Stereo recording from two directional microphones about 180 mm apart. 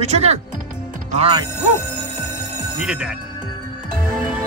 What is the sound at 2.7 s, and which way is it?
Speech, 5° right (ahead or behind).